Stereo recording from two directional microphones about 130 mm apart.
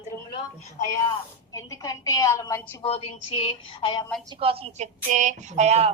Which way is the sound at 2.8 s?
45° left (ahead or behind).